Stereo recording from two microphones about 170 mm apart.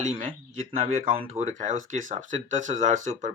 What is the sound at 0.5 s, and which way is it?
Speech, 50° right (ahead or behind).